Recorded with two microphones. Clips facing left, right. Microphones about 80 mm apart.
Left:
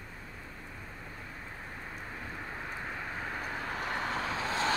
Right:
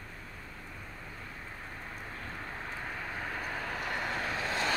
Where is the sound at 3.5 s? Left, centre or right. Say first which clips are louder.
Left 2 dB; left.